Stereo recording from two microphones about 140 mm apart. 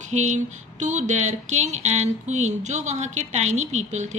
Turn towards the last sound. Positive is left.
turn(degrees=-55)  # may be behind; listen again after turning